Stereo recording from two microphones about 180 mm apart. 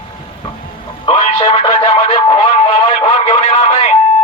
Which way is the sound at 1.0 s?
30° left (ahead or behind).